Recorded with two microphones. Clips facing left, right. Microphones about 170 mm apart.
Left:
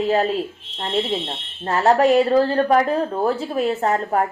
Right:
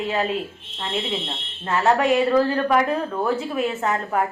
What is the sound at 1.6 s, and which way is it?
A woman's voice, 35° left (ahead or behind).